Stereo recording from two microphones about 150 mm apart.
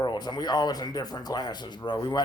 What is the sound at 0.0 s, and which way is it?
Speech, 30° left (ahead or behind).